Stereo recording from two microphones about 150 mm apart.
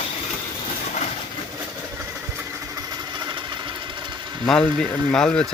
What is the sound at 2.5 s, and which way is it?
Engine, 25° right (ahead or behind).